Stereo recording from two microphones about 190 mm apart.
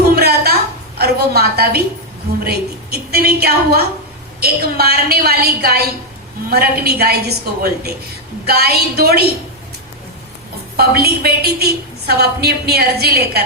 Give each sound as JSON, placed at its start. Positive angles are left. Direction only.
{"t": 0.2, "sound": "a sound", "side_deg": -55}
{"t": 0.9, "sound": "a woman's voice", "side_deg": -55}
{"t": 10.8, "sound": "a woman's voice", "side_deg": -55}